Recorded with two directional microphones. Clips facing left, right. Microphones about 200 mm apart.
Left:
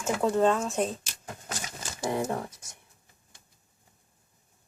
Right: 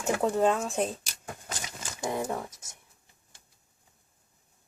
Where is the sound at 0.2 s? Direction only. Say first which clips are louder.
Left 3 dB; 15° right (ahead or behind).